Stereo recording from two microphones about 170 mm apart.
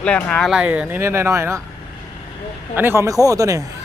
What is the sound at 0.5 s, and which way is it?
Speech, 10° right (ahead or behind).